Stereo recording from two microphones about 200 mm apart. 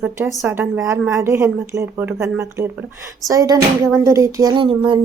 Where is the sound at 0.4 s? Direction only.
10° right (ahead or behind).